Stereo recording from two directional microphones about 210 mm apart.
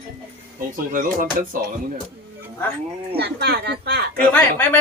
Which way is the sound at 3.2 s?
50° right (ahead or behind).